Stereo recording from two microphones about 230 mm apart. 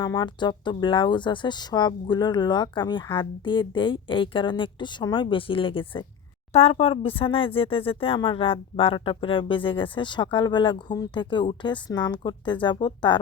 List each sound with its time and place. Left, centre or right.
0.0 s speech: centre